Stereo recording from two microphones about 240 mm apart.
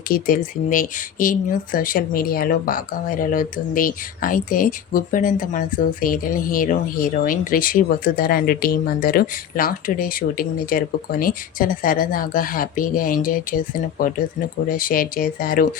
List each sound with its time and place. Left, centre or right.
0.1 s speech: left